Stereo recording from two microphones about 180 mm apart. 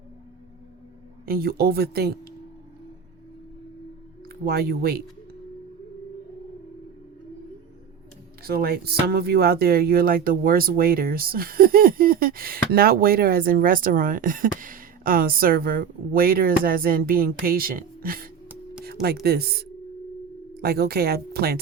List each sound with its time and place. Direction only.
1.2 s speech: 55° right (ahead or behind)
4.4 s speech: 60° right (ahead or behind)
8.4 s speech: 60° right (ahead or behind)
18.4 s a sound: 5° right (ahead or behind)
19.2 s speech: 60° right (ahead or behind)